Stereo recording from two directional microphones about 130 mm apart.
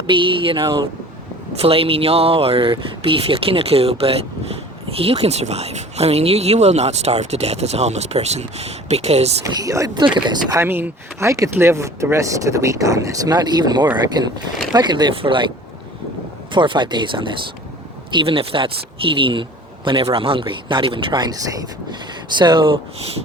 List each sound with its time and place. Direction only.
0.1 s speech: 40° right (ahead or behind)
0.6 s speech: 25° right (ahead or behind)
1.5 s speech: 45° right (ahead or behind)
9.4 s speech: 25° right (ahead or behind); by 15.4 s 40° right (ahead or behind)
16.5 s speech: 40° right (ahead or behind)